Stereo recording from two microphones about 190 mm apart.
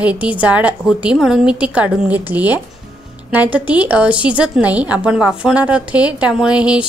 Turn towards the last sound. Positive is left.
turn(degrees=-5)  # may be behind; listen again after turning